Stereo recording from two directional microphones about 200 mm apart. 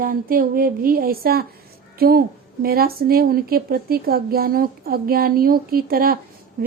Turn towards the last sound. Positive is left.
turn(degrees=-45)  # may be behind; listen again after turning